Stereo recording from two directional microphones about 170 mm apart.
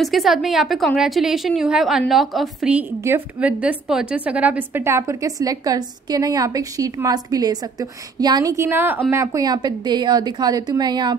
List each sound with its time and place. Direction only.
0.0 s a woman's voice: centre (ahead or behind); by 11.1 s 25° right (ahead or behind)